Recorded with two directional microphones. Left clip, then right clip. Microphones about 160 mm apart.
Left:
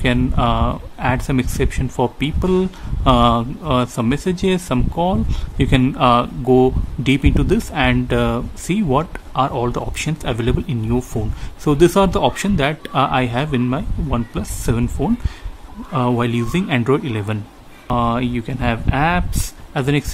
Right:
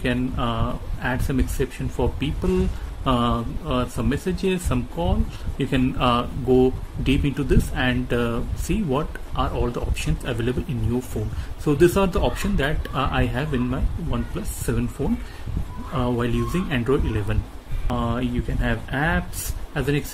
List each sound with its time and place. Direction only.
0.0 s speech: 40° left (ahead or behind)
15.9 s speech: 40° left (ahead or behind)